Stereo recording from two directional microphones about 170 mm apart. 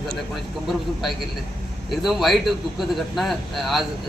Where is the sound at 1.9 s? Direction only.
Centre (ahead or behind).